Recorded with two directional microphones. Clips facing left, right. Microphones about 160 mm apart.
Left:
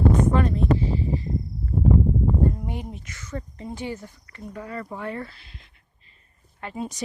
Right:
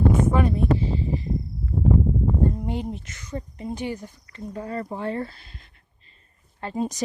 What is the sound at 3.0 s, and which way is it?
Speech, 20° right (ahead or behind).